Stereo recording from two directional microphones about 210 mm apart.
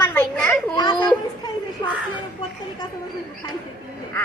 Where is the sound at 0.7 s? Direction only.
20° left (ahead or behind).